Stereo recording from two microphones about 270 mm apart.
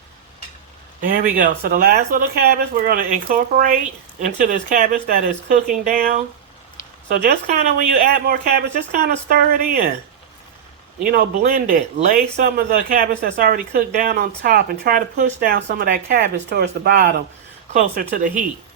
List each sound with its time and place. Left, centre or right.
1.0 s speech: right
7.3 s speech: right
11.0 s speech: right